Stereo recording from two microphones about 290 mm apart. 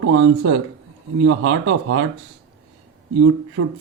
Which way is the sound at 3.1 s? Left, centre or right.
Right.